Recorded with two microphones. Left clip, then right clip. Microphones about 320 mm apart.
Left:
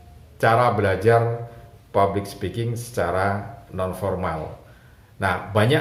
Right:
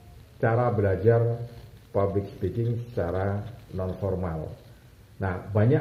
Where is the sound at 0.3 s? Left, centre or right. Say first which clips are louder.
Left 7 dB; left.